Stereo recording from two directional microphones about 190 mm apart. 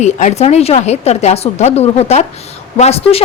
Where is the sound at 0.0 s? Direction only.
35° left (ahead or behind).